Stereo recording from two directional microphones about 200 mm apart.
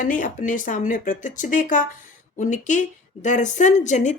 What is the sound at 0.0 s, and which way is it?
Speech, 40° left (ahead or behind).